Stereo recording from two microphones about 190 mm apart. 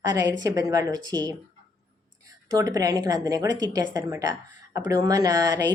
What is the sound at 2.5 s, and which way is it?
Speech, 20° right (ahead or behind).